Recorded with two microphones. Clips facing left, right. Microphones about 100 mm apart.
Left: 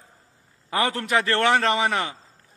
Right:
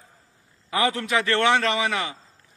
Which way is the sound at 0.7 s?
45° left (ahead or behind).